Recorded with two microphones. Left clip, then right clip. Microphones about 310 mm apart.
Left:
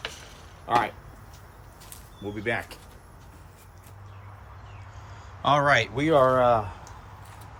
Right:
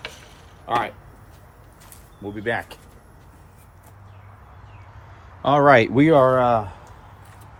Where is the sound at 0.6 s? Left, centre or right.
Centre.